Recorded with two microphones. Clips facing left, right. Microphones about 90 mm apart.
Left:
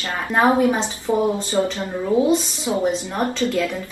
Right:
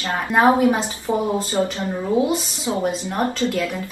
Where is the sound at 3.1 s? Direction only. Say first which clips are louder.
Even; 20° right (ahead or behind).